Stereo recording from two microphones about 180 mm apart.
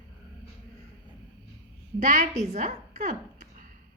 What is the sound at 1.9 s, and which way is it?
Speech, 45° right (ahead or behind).